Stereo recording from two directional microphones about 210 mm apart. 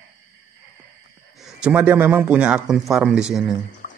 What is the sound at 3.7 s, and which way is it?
Music, 35° left (ahead or behind).